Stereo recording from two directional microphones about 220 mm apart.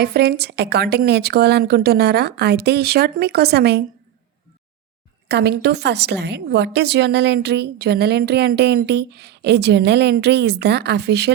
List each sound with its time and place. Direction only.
0.0 s a woman's voice: 45° right (ahead or behind)
5.3 s a woman's voice: 50° right (ahead or behind)